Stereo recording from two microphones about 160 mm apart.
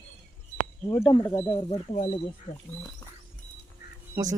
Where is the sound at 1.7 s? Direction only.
40° left (ahead or behind).